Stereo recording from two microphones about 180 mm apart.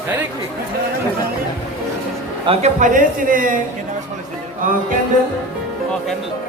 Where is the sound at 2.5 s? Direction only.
40° right (ahead or behind).